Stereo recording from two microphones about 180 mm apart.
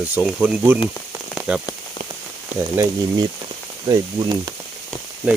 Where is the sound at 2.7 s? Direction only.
15° right (ahead or behind).